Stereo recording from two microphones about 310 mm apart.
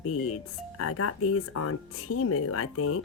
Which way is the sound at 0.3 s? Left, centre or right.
Left.